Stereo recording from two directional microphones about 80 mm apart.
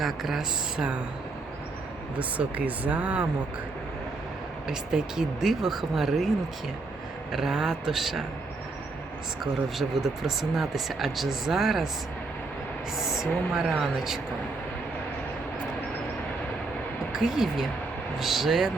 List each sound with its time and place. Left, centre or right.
0.0 s speech: centre
2.1 s speech: centre
4.7 s speech: centre
7.3 s speech: centre
9.4 s speech: centre
13.0 s speech: centre
17.1 s speech: centre